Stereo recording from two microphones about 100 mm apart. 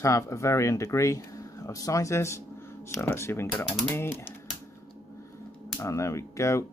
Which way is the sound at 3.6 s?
5° left (ahead or behind).